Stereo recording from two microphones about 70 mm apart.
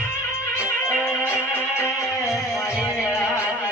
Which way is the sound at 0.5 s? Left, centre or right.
Left.